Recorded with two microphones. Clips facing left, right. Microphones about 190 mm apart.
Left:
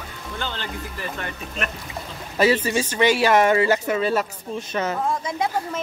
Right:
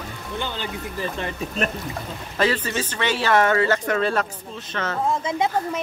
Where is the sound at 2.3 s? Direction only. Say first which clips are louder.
Left 4 dB; 10° left (ahead or behind).